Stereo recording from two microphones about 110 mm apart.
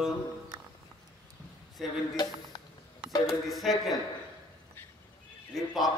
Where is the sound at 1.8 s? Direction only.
Centre (ahead or behind).